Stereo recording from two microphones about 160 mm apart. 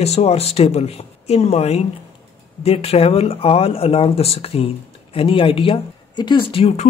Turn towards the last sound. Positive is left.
turn(degrees=35)  # may be behind; listen again after turning